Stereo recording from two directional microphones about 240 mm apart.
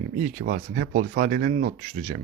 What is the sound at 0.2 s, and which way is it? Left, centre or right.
Speech, right.